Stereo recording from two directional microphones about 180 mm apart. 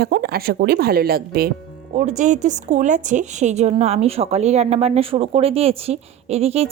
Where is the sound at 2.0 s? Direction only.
45° right (ahead or behind).